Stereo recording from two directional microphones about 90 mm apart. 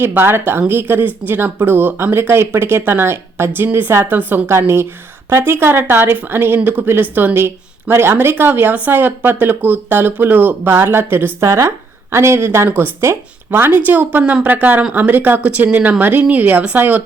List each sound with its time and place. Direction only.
0.0 s speech: 25° right (ahead or behind)
11.4 s a woman's voice: 35° right (ahead or behind); by 17.0 s 20° right (ahead or behind)